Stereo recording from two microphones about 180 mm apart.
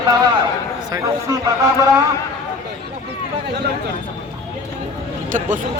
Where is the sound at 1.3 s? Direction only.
20° right (ahead or behind).